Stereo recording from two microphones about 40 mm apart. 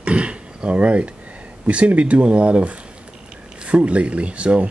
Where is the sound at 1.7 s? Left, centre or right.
Right.